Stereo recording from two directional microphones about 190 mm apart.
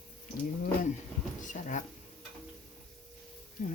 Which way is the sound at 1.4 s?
40° left (ahead or behind).